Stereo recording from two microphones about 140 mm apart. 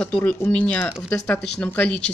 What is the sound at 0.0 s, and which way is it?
Speech, 10° left (ahead or behind).